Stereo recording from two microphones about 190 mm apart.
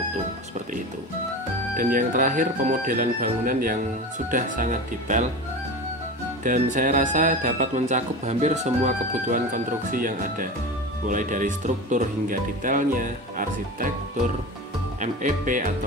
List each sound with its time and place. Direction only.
1.8 s speech: 45° right (ahead or behind)
6.4 s speech: 45° right (ahead or behind)